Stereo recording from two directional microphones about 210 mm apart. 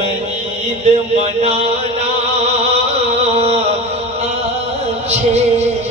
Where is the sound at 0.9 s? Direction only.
30° right (ahead or behind).